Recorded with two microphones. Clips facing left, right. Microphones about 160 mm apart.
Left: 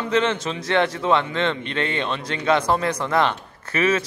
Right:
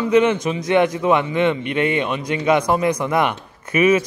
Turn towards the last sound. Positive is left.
turn(degrees=-15)  # may be behind; listen again after turning